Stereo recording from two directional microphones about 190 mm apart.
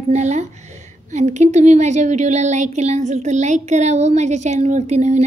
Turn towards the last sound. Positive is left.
turn(degrees=-35)  # may be behind; listen again after turning